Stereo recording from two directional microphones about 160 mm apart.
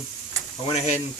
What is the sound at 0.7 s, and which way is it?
Speech, 45° left (ahead or behind).